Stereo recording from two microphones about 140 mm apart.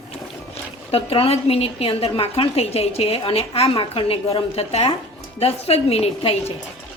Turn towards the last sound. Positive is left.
turn(degrees=45)  # may be behind; listen again after turning